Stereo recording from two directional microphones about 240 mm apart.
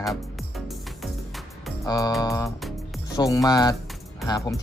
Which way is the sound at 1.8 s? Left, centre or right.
Centre.